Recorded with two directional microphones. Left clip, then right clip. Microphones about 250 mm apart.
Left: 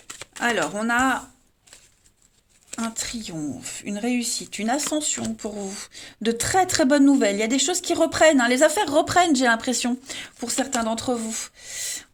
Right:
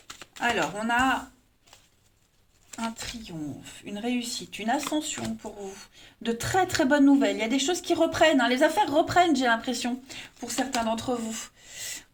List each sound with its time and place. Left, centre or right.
0.3 s speech: left
3.0 s speech: left